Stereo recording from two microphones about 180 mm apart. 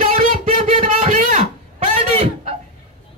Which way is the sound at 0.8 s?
45° right (ahead or behind).